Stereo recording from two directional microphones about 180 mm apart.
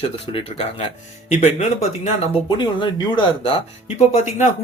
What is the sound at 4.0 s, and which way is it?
Speech, 40° left (ahead or behind).